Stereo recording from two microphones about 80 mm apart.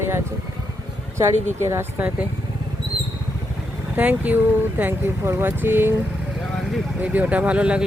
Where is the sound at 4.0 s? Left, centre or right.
Centre.